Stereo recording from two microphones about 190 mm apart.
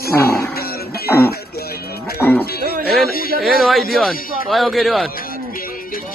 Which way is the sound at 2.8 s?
50° left (ahead or behind).